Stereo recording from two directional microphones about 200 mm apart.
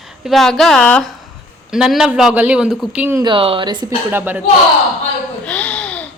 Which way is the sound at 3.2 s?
25° right (ahead or behind).